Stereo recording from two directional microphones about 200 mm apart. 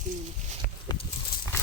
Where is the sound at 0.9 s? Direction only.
20° left (ahead or behind).